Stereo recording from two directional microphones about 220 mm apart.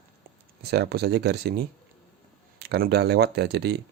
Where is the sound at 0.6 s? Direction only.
45° right (ahead or behind).